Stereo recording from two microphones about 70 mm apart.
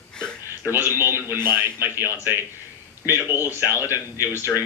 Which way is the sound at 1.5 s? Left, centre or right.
Right.